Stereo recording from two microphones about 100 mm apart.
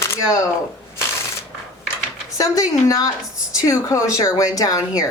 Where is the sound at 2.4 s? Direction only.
35° left (ahead or behind).